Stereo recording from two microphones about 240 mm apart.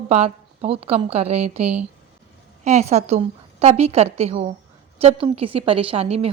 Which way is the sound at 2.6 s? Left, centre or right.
Right.